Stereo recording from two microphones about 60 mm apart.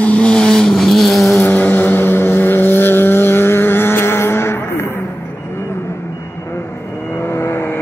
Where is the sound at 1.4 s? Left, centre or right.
Left.